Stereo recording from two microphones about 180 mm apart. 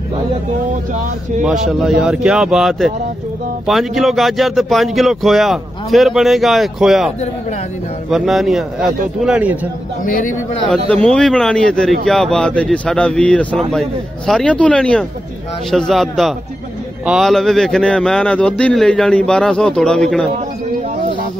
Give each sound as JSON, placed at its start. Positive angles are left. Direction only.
{"t": 1.4, "sound": "speech", "side_deg": 0}
{"t": 10.0, "sound": "speech", "side_deg": 50}
{"t": 10.7, "sound": "speech", "side_deg": 5}